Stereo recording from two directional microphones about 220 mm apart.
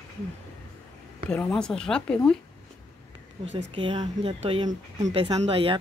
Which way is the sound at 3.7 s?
20° right (ahead or behind).